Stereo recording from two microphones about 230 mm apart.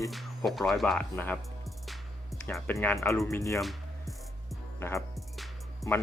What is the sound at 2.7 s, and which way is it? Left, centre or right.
Speech, centre.